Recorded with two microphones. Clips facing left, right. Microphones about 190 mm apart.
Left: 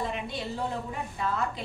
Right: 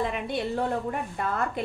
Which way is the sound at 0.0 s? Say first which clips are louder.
Right 5 dB; 60° right (ahead or behind).